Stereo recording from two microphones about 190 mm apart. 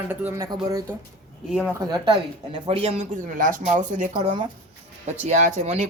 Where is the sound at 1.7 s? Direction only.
20° right (ahead or behind).